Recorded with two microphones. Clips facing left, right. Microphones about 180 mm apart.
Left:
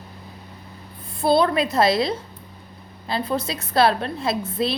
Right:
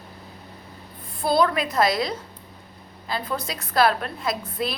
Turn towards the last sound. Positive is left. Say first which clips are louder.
# left 4 dB
turn(degrees=25)  # may be behind; listen again after turning